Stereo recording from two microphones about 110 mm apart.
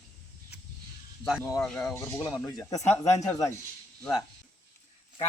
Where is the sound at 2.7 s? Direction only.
90° left.